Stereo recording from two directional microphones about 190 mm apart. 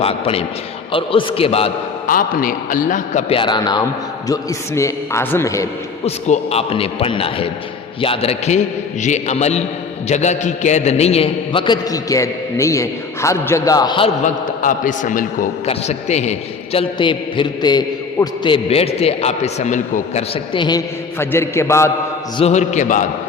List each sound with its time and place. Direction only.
0.0 s a man's voice: 30° left (ahead or behind)
2.0 s a man's voice: 45° left (ahead or behind); by 5.6 s 15° left (ahead or behind)
6.1 s a man's voice: 35° left (ahead or behind)
14.6 s a man's voice: 45° left (ahead or behind)
16.7 s a man's voice: 25° left (ahead or behind)
22.4 s a man's voice: 35° left (ahead or behind)